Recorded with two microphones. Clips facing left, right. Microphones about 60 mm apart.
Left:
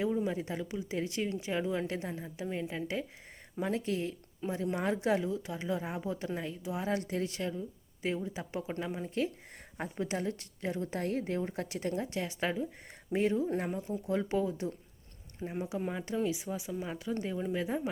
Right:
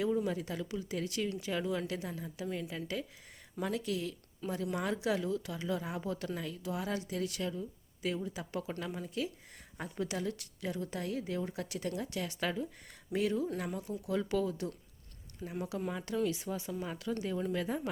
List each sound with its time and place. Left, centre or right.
0.0 s speech: left